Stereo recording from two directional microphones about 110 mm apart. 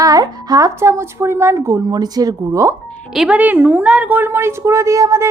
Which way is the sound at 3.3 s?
15° right (ahead or behind).